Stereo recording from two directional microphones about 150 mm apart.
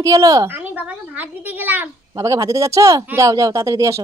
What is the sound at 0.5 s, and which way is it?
A woman's voice, 10° right (ahead or behind).